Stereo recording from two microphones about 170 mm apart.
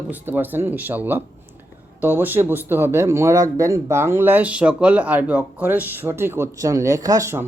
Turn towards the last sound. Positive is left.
turn(degrees=-15)  # may be behind; listen again after turning